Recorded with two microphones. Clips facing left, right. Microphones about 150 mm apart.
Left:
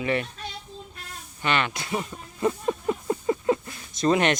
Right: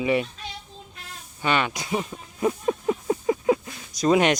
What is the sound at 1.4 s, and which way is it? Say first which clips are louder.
Speech: right 2 dB; 10° right (ahead or behind).